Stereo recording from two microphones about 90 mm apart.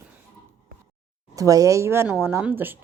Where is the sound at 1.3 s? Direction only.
40° right (ahead or behind); by 2.8 s 20° right (ahead or behind).